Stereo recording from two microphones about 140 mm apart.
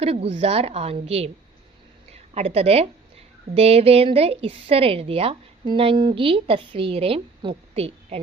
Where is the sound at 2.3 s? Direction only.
45° right (ahead or behind).